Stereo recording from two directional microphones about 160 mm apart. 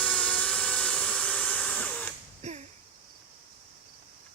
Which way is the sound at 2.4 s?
45° right (ahead or behind).